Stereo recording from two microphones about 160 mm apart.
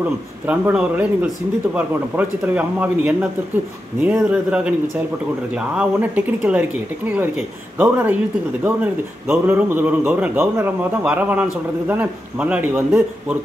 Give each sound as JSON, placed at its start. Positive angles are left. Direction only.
{"t": 0.5, "sound": "a man's voice", "side_deg": -10}